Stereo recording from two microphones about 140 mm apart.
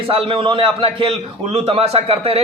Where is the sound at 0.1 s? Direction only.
40° right (ahead or behind).